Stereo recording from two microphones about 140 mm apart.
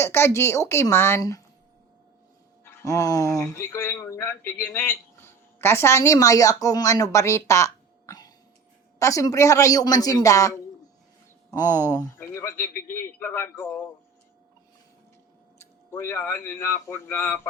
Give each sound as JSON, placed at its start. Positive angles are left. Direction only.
{"t": 0.0, "sound": "a man's voice", "side_deg": 20}
{"t": 2.6, "sound": "a man's voice", "side_deg": 25}
{"t": 15.9, "sound": "a man's voice", "side_deg": 15}